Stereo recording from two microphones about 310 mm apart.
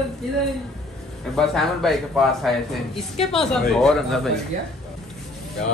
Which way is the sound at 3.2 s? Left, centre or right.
Centre.